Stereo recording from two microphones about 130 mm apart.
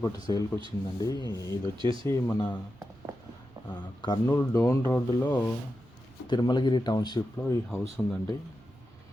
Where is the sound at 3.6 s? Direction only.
35° left (ahead or behind); by 5.4 s 15° left (ahead or behind).